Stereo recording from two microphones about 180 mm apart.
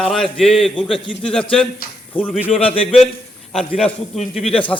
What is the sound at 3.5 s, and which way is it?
A man's voice, 5° left (ahead or behind).